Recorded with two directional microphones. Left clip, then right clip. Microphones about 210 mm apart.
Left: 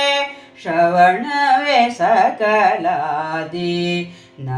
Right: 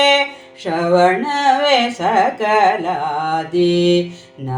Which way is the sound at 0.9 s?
15° right (ahead or behind).